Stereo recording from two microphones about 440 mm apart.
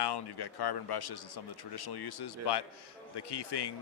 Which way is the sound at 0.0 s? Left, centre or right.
Left.